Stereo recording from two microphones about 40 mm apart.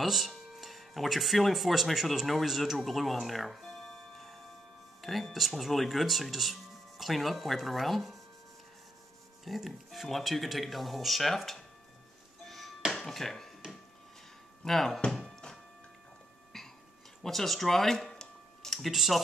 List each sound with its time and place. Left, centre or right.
0.0 s speech: centre
9.4 s speech: centre
12.4 s music: centre
12.9 s a sound: centre
14.6 s speech: centre
15.0 s thunk: centre
16.5 s a sound: centre
17.2 s speech: centre
18.0 s a sound: centre
18.7 s speech: centre